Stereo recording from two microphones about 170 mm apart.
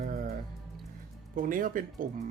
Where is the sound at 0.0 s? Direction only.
55° right (ahead or behind).